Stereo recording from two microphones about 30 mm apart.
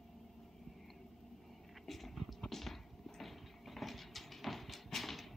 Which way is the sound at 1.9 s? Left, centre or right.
Centre.